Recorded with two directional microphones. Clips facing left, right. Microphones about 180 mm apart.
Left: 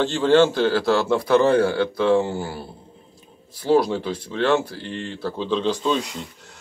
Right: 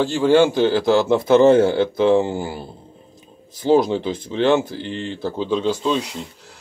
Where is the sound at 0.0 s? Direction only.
10° right (ahead or behind).